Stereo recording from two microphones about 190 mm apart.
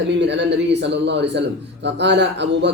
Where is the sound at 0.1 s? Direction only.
70° right (ahead or behind).